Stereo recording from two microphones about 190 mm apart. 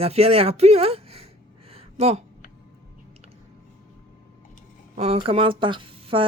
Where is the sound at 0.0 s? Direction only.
30° right (ahead or behind).